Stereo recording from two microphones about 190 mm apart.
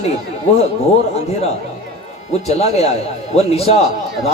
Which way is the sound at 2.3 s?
35° left (ahead or behind).